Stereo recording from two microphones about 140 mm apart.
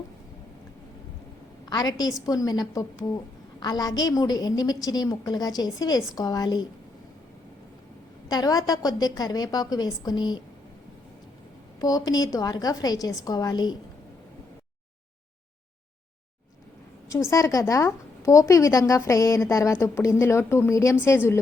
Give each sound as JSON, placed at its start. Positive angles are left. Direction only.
{"t": 1.7, "sound": "a woman's voice", "side_deg": 30}
{"t": 8.3, "sound": "a woman's voice", "side_deg": 25}
{"t": 11.8, "sound": "a woman's voice", "side_deg": 25}
{"t": 17.1, "sound": "a woman's voice", "side_deg": 20}